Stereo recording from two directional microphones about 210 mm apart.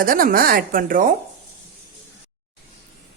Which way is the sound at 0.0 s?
45° right (ahead or behind).